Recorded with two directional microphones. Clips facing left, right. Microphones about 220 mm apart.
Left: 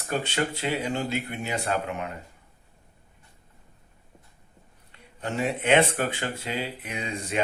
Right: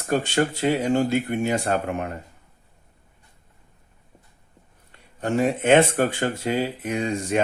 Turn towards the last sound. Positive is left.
turn(degrees=-45)  # may be behind; listen again after turning